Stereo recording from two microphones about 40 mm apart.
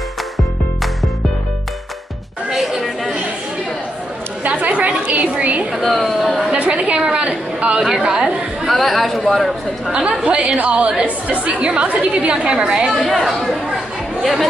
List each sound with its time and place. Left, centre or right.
4.4 s a woman's voice: right
5.8 s speech: centre
6.6 s a woman's voice: right
8.6 s speech: centre
9.9 s a woman's voice: right
12.9 s speech: centre
14.2 s speech: centre